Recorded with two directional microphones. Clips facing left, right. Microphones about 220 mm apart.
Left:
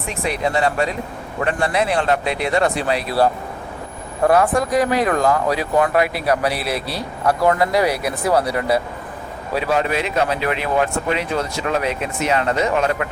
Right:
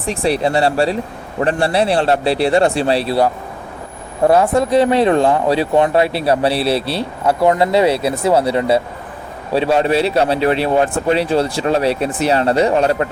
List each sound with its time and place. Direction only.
0.0 s speech: 35° right (ahead or behind)
4.3 s speech: 25° right (ahead or behind)